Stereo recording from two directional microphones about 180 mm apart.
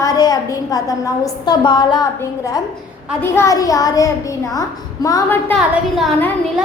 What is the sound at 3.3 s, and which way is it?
A woman's voice, 15° left (ahead or behind).